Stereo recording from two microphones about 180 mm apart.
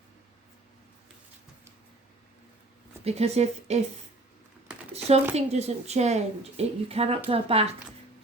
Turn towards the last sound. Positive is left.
turn(degrees=-35)  # may be behind; listen again after turning